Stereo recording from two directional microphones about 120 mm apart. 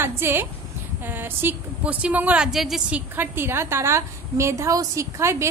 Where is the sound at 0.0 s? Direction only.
20° right (ahead or behind).